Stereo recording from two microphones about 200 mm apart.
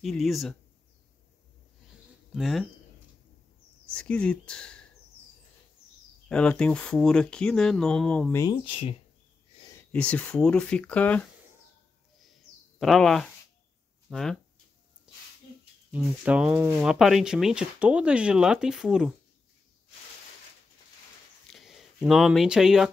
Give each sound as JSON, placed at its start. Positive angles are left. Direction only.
{"t": 0.0, "sound": "speech", "side_deg": 0}
{"t": 2.3, "sound": "speech", "side_deg": 0}
{"t": 3.9, "sound": "speech", "side_deg": 5}
{"t": 6.2, "sound": "speech", "side_deg": 5}
{"t": 8.4, "sound": "speech", "side_deg": 25}
{"t": 9.9, "sound": "speech", "side_deg": 5}
{"t": 12.7, "sound": "speech", "side_deg": 0}
{"t": 15.1, "sound": "snake", "side_deg": -5}
{"t": 15.9, "sound": "speech", "side_deg": -5}
{"t": 21.5, "sound": "a sound", "side_deg": 0}